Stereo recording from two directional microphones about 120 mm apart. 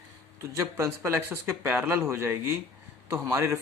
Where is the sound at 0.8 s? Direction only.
20° right (ahead or behind).